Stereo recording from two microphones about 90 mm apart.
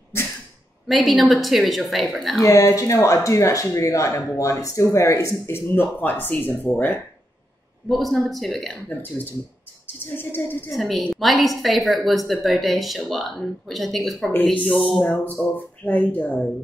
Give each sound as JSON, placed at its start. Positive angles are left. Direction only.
{"t": 0.8, "sound": "speech", "side_deg": 0}
{"t": 2.4, "sound": "speech", "side_deg": 35}
{"t": 5.5, "sound": "speech", "side_deg": 20}
{"t": 7.9, "sound": "speech", "side_deg": 0}
{"t": 10.1, "sound": "speech", "side_deg": 20}
{"t": 10.7, "sound": "speech", "side_deg": 0}
{"t": 15.0, "sound": "speech", "side_deg": 20}